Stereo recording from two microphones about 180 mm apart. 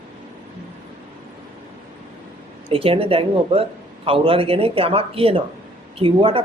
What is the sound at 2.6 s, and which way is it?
Speech, 30° right (ahead or behind).